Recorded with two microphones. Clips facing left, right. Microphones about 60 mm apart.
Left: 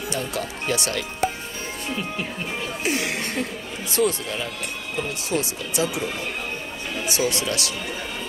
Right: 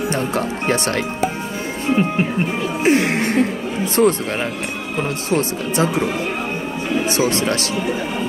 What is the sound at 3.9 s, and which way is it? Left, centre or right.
Speech, right.